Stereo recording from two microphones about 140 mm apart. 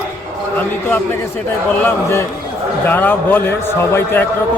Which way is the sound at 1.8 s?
20° left (ahead or behind).